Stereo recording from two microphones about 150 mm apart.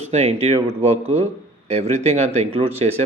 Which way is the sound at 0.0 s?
50° right (ahead or behind).